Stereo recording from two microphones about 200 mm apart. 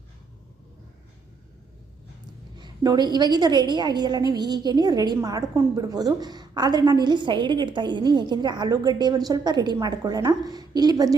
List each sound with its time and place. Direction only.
2.6 s a woman's voice: 20° right (ahead or behind)